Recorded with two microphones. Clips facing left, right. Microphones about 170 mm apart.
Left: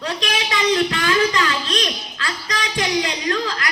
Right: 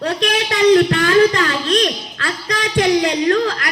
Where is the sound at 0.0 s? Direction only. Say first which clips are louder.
Right 6 dB; 60° right (ahead or behind).